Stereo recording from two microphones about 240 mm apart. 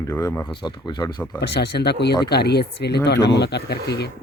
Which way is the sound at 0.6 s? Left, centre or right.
Centre.